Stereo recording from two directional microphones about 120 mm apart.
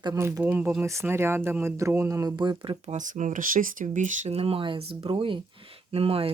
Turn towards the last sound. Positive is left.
turn(degrees=-50)  # may be behind; listen again after turning